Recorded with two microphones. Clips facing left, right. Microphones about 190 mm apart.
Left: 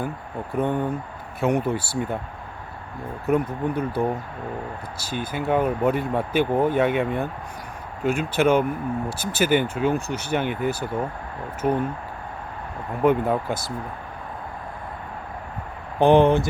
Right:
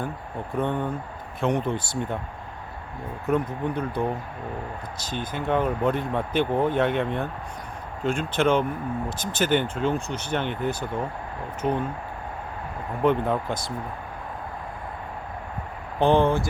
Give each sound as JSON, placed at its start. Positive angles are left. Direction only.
{"t": 0.5, "sound": "speech", "side_deg": 10}
{"t": 3.2, "sound": "speech", "side_deg": 10}
{"t": 13.0, "sound": "speech", "side_deg": 10}
{"t": 16.0, "sound": "speech", "side_deg": 15}